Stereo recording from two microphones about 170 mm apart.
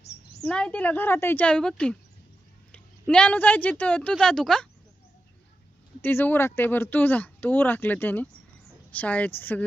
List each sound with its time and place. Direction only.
0.4 s speech: 5° left (ahead or behind)
6.0 s speech: 10° left (ahead or behind)